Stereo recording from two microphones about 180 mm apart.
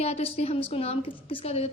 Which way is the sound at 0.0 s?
35° left (ahead or behind).